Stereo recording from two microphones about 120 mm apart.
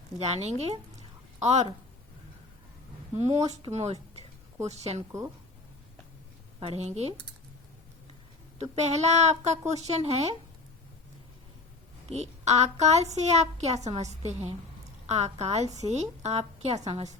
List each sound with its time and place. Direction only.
0.2 s a woman's voice: 65° right (ahead or behind)
3.2 s a woman's voice: 65° right (ahead or behind)
6.6 s a woman's voice: 60° right (ahead or behind)
8.5 s a woman's voice: 65° right (ahead or behind)
12.0 s a woman's voice: 65° right (ahead or behind)